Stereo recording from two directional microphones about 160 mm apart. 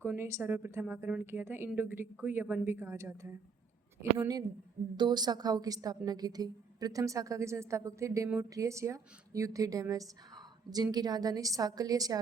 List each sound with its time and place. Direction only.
0.0 s a woman's voice: 15° right (ahead or behind)